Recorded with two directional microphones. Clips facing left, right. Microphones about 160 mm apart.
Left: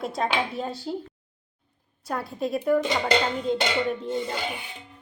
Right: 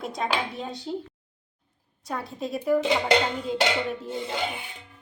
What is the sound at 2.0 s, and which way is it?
Speech, centre (ahead or behind).